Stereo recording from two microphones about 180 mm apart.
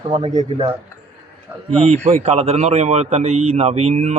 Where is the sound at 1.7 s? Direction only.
35° right (ahead or behind).